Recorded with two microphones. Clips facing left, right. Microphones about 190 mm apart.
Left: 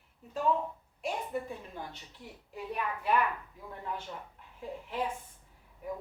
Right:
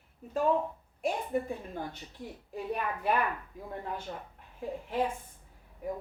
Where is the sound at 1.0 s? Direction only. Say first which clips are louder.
Right 4 dB; 45° right (ahead or behind).